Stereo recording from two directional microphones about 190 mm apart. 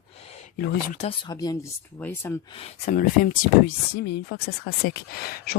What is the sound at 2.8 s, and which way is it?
Speech, 45° left (ahead or behind).